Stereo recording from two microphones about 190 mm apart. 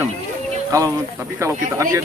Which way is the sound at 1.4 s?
15° right (ahead or behind).